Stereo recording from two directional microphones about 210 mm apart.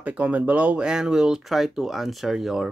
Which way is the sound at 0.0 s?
5° right (ahead or behind).